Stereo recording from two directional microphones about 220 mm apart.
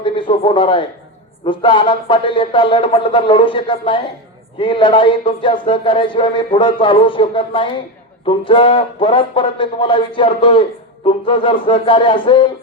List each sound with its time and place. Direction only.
0.0 s speech: 20° left (ahead or behind)